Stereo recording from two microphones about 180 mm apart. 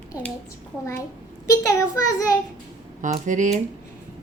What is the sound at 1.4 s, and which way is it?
Speech, 20° left (ahead or behind).